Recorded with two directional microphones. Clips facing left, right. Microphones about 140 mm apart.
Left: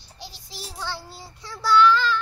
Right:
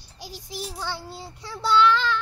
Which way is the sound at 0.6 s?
20° right (ahead or behind).